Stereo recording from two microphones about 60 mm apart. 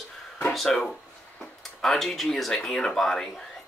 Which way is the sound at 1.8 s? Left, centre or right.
Centre.